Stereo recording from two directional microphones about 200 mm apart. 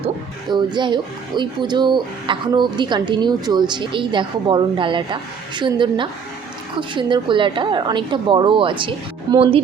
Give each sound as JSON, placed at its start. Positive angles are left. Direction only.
{"t": 0.5, "sound": "speech", "side_deg": -20}